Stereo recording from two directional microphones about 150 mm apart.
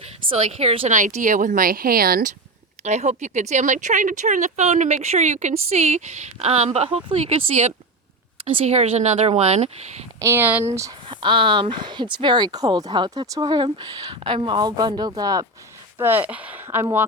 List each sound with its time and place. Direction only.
0.3 s a woman's voice: 40° right (ahead or behind)
0.9 s speech: 60° right (ahead or behind); by 2.3 s 80° right
2.8 s speech: 50° right (ahead or behind)
8.4 s speech: 40° right (ahead or behind)
10.2 s speech: 15° right (ahead or behind)
10.8 s speech: 25° right (ahead or behind)
16.0 s speech: 15° right (ahead or behind)